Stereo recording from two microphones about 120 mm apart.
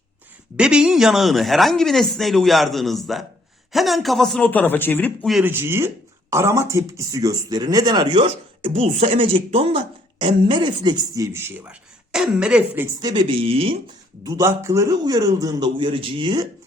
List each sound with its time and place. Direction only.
0.5 s speech: 10° right (ahead or behind)
4.4 s speech: 15° left (ahead or behind)
5.4 s speech: 20° right (ahead or behind); by 8.8 s 45° right (ahead or behind)
8.8 s a woman's voice: 65° right (ahead or behind); by 10.9 s 40° right (ahead or behind)
11.1 s speech: 25° right (ahead or behind)
13.0 s a man's voice: 35° right (ahead or behind)
13.4 s a woman's voice: 50° right (ahead or behind)
14.3 s a man's voice: 25° right (ahead or behind)